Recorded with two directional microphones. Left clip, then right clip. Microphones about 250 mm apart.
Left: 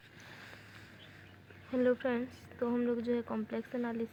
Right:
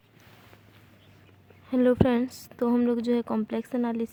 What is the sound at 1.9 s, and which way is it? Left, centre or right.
Speech, right.